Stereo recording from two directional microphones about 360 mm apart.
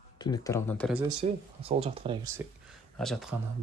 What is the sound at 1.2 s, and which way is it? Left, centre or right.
Speech, centre.